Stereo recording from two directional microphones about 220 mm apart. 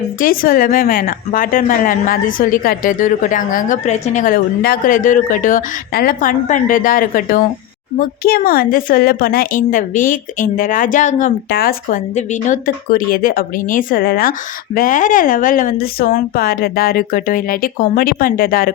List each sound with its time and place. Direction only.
0.2 s a woman's voice: 40° left (ahead or behind)